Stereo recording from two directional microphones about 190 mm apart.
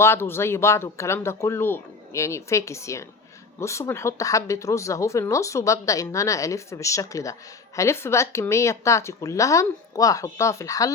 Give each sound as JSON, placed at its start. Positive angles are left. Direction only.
{"t": 0.0, "sound": "speech", "side_deg": 15}